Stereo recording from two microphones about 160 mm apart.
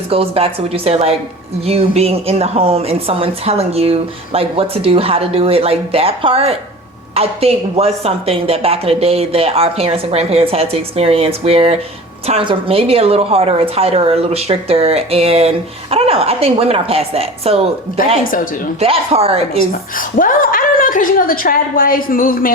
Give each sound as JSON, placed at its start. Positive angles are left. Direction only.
{"t": 0.1, "sound": "a woman's voice", "side_deg": -35}
{"t": 18.2, "sound": "a woman's voice", "side_deg": 60}
{"t": 18.8, "sound": "a woman's voice", "side_deg": -40}
{"t": 20.0, "sound": "a woman's voice", "side_deg": 60}